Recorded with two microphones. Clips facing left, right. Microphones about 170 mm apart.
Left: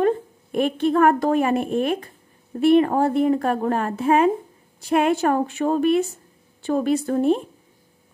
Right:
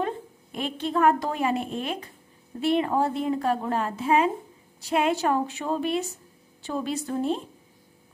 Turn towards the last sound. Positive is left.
turn(degrees=60)  # may be behind; listen again after turning